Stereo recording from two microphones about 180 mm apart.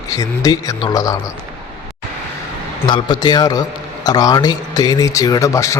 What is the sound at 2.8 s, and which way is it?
A man's voice, 25° left (ahead or behind).